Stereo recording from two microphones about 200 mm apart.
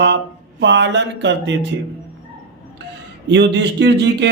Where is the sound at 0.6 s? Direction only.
65° right (ahead or behind).